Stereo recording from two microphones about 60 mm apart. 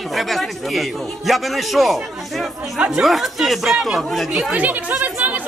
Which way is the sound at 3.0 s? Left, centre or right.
Centre.